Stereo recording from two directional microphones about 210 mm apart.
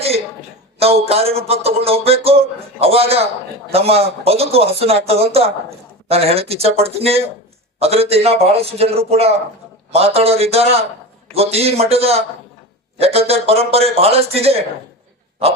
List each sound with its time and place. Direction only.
0.8 s a man's voice: 30° right (ahead or behind)